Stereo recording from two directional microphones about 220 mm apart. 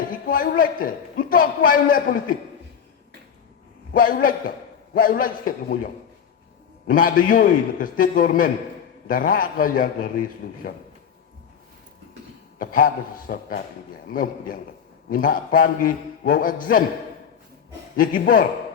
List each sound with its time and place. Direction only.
0.1 s a man's voice: 40° left (ahead or behind)
3.9 s a man's voice: 40° left (ahead or behind)
12.5 s a man's voice: 40° left (ahead or behind)
17.9 s a man's voice: 40° left (ahead or behind)